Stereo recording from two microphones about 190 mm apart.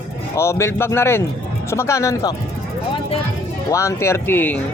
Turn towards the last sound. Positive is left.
turn(degrees=10)  # may be behind; listen again after turning